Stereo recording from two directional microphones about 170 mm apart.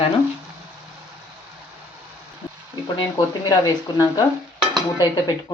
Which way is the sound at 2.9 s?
25° left (ahead or behind).